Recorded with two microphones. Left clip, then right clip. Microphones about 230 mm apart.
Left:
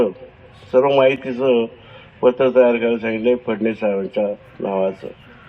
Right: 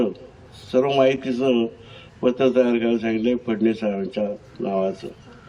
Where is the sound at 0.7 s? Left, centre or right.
Left.